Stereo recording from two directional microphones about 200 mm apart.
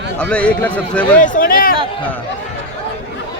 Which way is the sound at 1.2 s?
40° left (ahead or behind).